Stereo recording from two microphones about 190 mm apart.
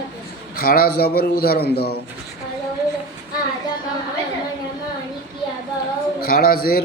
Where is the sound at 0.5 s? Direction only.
50° left (ahead or behind).